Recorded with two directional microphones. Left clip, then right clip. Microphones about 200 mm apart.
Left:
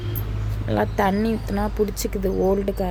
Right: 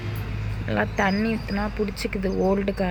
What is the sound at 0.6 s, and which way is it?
Speech, 20° left (ahead or behind).